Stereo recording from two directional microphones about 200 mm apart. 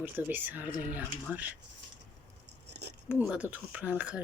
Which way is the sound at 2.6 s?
60° right (ahead or behind).